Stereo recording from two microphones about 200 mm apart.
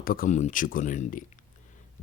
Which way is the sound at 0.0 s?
45° left (ahead or behind).